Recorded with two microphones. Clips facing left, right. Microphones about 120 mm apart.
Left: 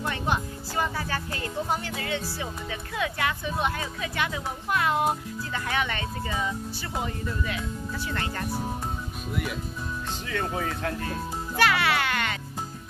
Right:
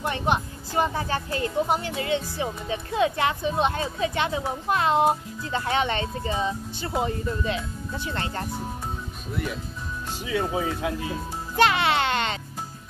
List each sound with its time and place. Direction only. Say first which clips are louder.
0.0 s speech: right 3 dB; 20° right (ahead or behind)
9.3 s speech: right 1 dB; 5° left (ahead or behind)
10.2 s speech: right 5 dB; 10° right (ahead or behind)
11.5 s speech: right 3 dB; 20° right (ahead or behind)